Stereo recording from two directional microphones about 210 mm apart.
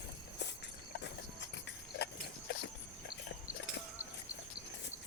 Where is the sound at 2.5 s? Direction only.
50° left (ahead or behind).